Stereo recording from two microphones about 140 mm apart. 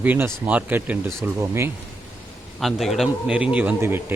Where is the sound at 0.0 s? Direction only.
10° right (ahead or behind).